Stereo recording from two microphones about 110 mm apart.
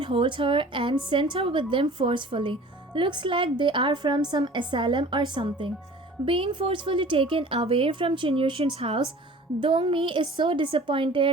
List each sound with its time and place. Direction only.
0.0 s a woman's voice: 50° right (ahead or behind)